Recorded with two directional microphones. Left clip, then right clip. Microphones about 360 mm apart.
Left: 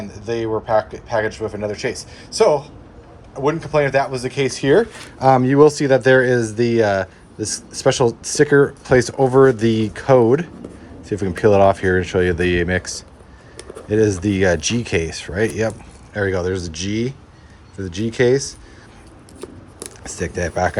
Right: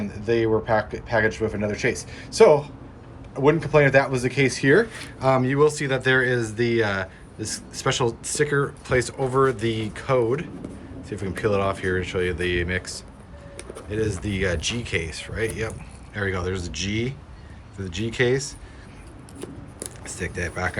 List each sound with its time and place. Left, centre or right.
0.0 s speech: centre
19.4 s chopping: centre
20.1 s speech: centre